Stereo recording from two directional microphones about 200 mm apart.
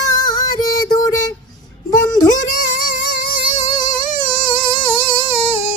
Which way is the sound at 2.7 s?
45° left (ahead or behind).